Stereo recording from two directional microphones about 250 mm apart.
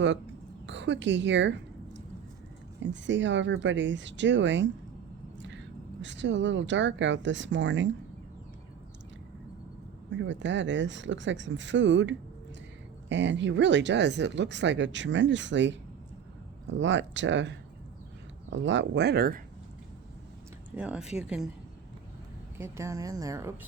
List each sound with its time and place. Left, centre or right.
0.7 s a woman's voice: right
10.1 s speech: right
20.7 s speech: centre
22.5 s a woman's voice: centre